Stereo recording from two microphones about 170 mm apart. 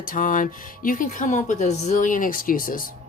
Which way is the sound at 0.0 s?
55° left (ahead or behind).